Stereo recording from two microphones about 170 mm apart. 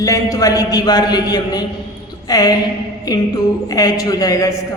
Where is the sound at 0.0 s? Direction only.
20° left (ahead or behind).